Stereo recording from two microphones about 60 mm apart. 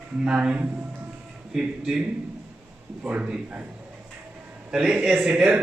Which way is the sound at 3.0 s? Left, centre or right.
Centre.